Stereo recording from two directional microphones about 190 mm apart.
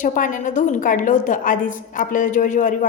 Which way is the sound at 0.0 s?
45° left (ahead or behind).